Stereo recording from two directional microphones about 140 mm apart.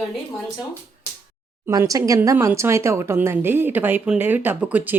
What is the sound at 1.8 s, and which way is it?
Speech, 25° right (ahead or behind).